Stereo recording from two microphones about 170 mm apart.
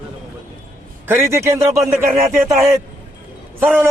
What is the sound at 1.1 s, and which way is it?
Speech, 15° right (ahead or behind).